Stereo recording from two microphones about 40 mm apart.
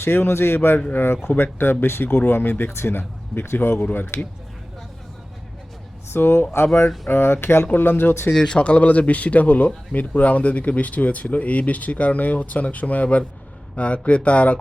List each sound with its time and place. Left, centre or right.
0.0 s a man's voice: left
1.4 s speech: left
6.1 s speech: left
7.7 s speech: left
8.3 s speech: centre